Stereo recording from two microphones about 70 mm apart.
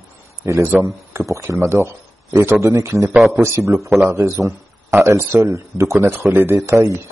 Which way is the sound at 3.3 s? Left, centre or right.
Right.